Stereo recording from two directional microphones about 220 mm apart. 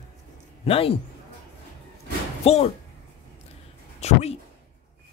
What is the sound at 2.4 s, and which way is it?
Speech, 25° left (ahead or behind).